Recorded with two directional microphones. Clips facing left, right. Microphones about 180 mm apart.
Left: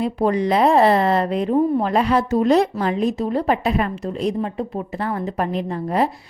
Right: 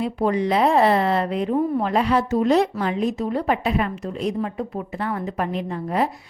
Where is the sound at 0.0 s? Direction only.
40° left (ahead or behind).